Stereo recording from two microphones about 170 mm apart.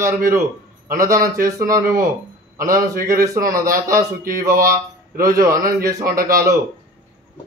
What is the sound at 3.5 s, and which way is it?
Speech, 55° right (ahead or behind).